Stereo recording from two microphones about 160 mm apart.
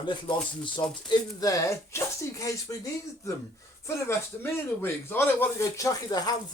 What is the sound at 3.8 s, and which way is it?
A man's voice, 15° left (ahead or behind).